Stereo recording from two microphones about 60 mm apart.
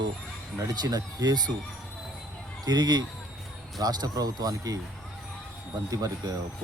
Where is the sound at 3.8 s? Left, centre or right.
Right.